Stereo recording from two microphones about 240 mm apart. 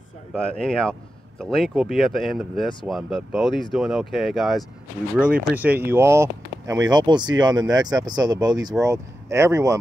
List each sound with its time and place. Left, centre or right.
0.3 s speech: centre